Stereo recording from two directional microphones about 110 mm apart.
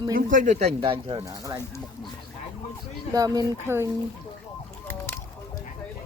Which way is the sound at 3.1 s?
35° right (ahead or behind).